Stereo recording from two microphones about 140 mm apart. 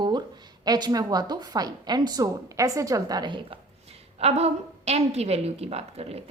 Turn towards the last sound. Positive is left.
turn(degrees=-45)  # may be behind; listen again after turning